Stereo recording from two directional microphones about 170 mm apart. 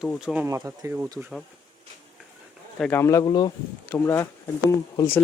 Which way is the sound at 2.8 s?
15° left (ahead or behind).